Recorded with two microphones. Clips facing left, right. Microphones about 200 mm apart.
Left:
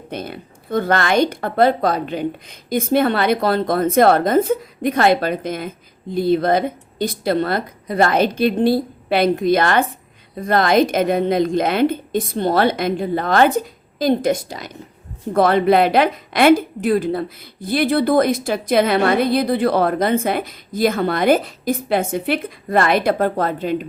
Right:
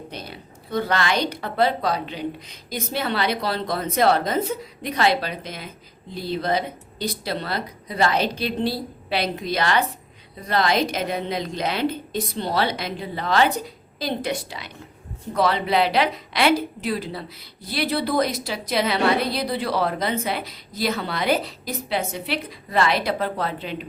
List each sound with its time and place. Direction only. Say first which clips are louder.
0.1 s speech: left 8 dB; 55° left (ahead or behind)